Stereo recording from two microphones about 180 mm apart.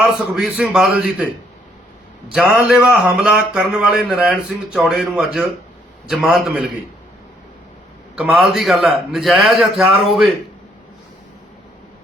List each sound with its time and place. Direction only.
0.0 s speech: 5° right (ahead or behind)
2.3 s speech: 5° right (ahead or behind)
8.1 s speech: 5° right (ahead or behind)